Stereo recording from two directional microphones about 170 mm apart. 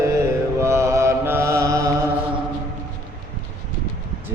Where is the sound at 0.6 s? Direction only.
15° right (ahead or behind).